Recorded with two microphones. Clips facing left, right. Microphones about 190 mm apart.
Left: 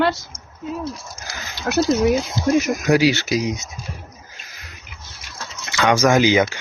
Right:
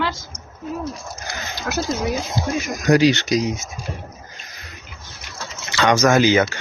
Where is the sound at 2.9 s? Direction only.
10° left (ahead or behind).